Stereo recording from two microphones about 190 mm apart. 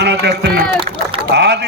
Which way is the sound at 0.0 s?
60° right (ahead or behind).